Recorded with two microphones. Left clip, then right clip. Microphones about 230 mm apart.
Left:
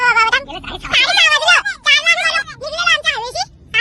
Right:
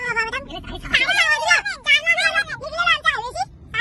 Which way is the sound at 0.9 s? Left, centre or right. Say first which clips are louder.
Left 5 dB; centre.